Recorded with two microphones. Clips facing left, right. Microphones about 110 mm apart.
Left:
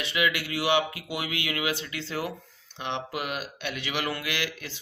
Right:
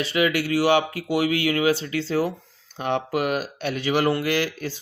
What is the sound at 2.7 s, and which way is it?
Speech, 45° right (ahead or behind).